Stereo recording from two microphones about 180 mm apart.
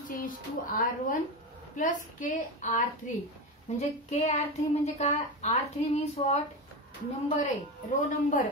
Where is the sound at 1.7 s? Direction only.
45° left (ahead or behind).